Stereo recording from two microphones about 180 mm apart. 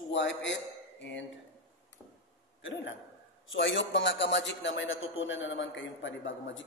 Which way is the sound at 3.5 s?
90° left.